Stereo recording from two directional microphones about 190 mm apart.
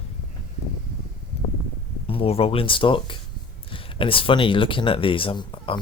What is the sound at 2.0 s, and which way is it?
Speech, 30° left (ahead or behind).